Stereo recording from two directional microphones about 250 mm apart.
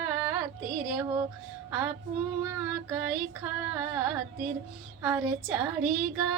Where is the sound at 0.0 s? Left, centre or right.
Centre.